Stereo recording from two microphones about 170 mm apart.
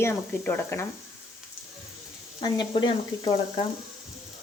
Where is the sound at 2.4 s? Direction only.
25° left (ahead or behind).